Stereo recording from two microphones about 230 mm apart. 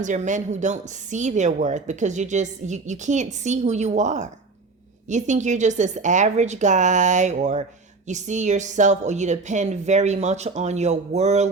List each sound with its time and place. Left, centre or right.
0.0 s a woman's voice: right